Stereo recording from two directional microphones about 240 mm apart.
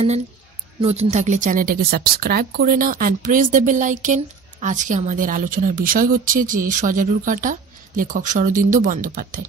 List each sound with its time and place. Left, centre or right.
0.7 s speech: right